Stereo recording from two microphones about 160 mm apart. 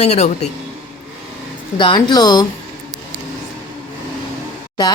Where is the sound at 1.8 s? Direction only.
30° left (ahead or behind).